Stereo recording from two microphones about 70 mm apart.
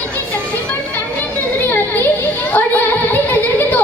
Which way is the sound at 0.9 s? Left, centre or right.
Left.